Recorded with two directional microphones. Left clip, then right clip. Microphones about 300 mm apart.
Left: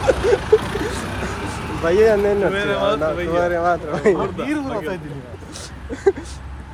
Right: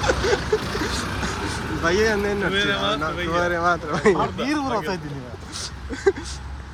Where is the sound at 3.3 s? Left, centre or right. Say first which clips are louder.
Left 1 dB; centre.